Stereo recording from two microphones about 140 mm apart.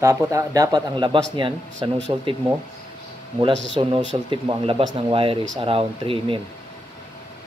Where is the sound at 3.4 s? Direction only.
35° right (ahead or behind).